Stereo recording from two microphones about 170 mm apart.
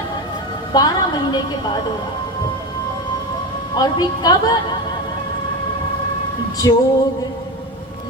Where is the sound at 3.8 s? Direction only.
25° left (ahead or behind).